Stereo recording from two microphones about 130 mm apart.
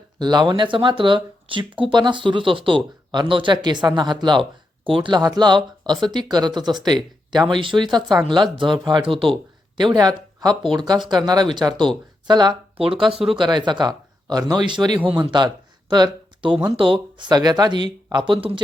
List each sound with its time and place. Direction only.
0.2 s speech: 35° right (ahead or behind)
13.1 s speech: 5° right (ahead or behind)
13.4 s speech: 35° right (ahead or behind)